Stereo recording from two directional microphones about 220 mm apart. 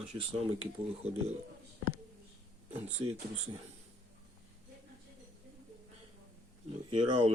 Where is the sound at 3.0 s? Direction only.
25° right (ahead or behind).